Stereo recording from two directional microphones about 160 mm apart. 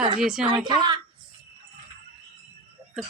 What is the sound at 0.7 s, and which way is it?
Speech, 30° right (ahead or behind).